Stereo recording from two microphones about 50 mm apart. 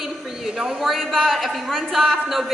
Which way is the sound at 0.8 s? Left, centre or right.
Centre.